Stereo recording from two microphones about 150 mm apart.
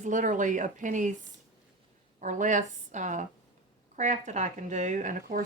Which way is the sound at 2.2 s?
55° right (ahead or behind).